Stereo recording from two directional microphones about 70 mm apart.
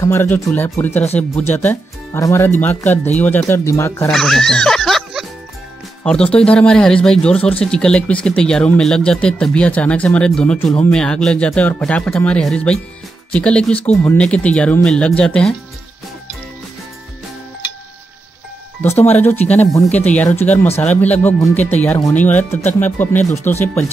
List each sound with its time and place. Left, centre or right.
0.0 s speech: left
2.1 s speech: left
2.6 s speech: left
3.4 s speech: left
4.1 s speech: centre
6.0 s speech: centre
18.8 s speech: left